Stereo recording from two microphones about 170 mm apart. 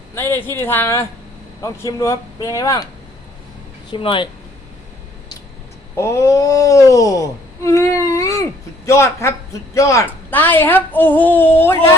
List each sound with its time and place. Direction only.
0.2 s a woman's voice: 15° left (ahead or behind)
3.9 s speech: 30° left (ahead or behind)
6.0 s a woman's voice: 15° left (ahead or behind)